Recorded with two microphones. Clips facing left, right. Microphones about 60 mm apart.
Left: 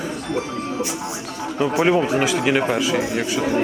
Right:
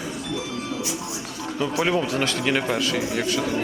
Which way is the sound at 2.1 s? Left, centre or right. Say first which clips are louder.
Left 5 dB; centre.